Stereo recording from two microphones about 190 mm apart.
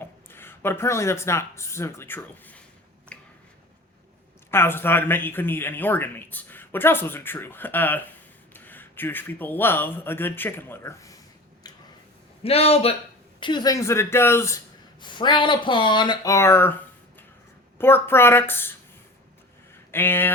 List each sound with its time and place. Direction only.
0.0 s speech: 10° left (ahead or behind)
3.1 s finger snapping: 5° left (ahead or behind)
4.5 s speech: 10° left (ahead or behind)
11.6 s a sound: 20° left (ahead or behind)
12.4 s a man's voice: 30° left (ahead or behind); by 14.6 s 15° left (ahead or behind)
15.0 s speech: 25° left (ahead or behind)
17.7 s speech: 10° left (ahead or behind)
19.9 s speech: 10° left (ahead or behind)